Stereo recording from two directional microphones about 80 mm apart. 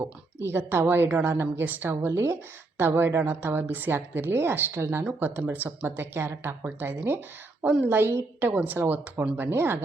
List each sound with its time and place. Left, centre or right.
0.0 s a woman's voice: right
7.6 s a woman's voice: centre
7.9 s a woman's voice: right